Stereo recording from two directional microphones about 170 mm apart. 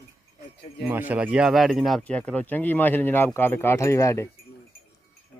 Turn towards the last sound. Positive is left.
turn(degrees=15)  # may be behind; listen again after turning